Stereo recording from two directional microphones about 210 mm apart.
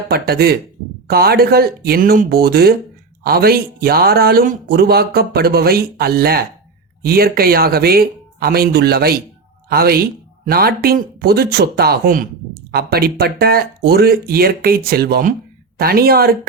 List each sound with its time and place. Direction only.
0.1 s speech: 50° right (ahead or behind)